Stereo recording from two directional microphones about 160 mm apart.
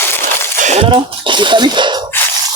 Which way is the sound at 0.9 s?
30° right (ahead or behind).